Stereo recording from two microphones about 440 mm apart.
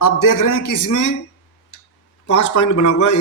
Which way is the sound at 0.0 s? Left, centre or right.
Left.